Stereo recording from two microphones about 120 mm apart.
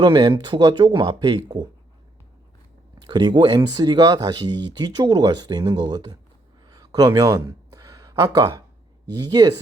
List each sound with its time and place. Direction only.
0.0 s speech: 40° right (ahead or behind)
3.1 s speech: 35° right (ahead or behind)
6.7 s a sound: 35° right (ahead or behind)